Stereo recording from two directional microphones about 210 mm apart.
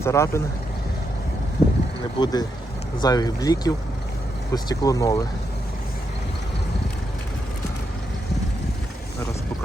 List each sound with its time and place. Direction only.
0.0 s speech: 15° left (ahead or behind)
2.1 s speech: 20° left (ahead or behind)